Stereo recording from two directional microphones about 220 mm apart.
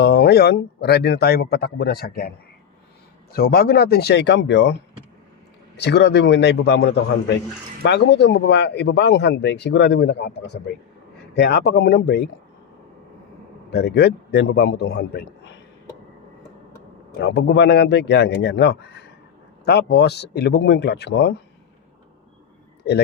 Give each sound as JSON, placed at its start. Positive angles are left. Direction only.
{"t": 0.0, "sound": "speech", "side_deg": 50}
{"t": 3.3, "sound": "speech", "side_deg": 45}
{"t": 13.7, "sound": "speech", "side_deg": 45}
{"t": 17.2, "sound": "speech", "side_deg": 50}